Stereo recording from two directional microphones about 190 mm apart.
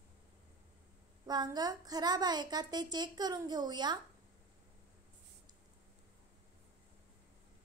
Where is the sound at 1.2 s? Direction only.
20° right (ahead or behind).